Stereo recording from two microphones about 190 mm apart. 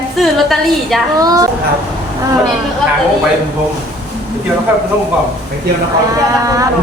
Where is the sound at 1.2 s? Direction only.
20° right (ahead or behind).